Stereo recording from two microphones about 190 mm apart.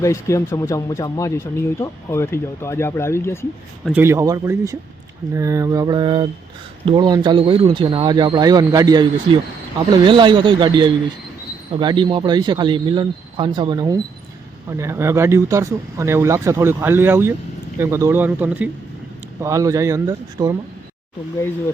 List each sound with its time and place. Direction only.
0.0 s speech: 15° left (ahead or behind)
3.9 s speech: 15° right (ahead or behind)